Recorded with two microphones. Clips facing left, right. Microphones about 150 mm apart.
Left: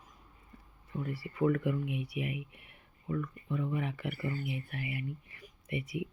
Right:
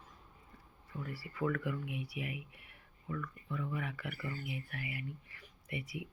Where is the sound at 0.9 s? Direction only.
20° left (ahead or behind).